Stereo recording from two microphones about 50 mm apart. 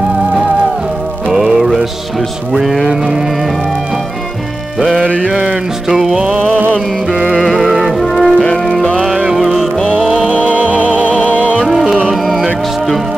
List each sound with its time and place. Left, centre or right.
1.3 s music: centre
4.7 s music: centre
5.0 s mantra: right
5.9 s music: centre
7.3 s music: centre
8.4 s music: centre
9.3 s music: centre
11.1 s music: left
11.6 s music: centre